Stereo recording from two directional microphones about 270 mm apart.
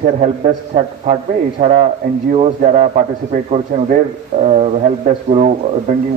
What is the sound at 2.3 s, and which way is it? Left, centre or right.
Speech, right.